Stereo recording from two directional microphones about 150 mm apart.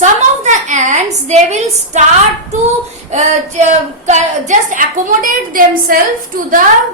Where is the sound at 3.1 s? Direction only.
50° right (ahead or behind); by 5.9 s 70° right (ahead or behind).